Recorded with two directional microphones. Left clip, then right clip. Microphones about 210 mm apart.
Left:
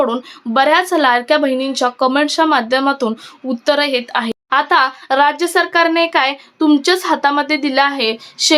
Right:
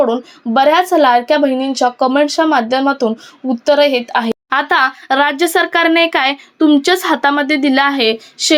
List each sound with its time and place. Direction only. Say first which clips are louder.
0.0 s speech: right 3 dB; centre (ahead or behind)